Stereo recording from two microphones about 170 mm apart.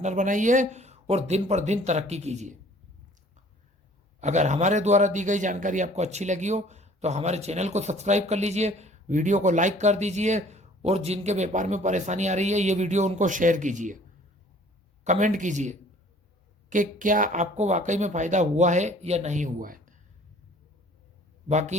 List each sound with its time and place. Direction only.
0.0 s a man's voice: 45° right (ahead or behind)
4.2 s a man's voice: 45° right (ahead or behind)
15.0 s a man's voice: 45° right (ahead or behind)
21.5 s speech: 40° right (ahead or behind)